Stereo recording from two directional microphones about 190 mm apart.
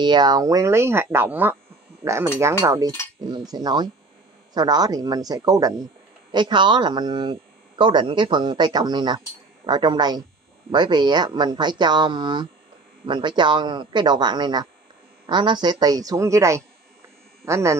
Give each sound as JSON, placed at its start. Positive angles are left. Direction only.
{"t": 0.0, "sound": "speech", "side_deg": -20}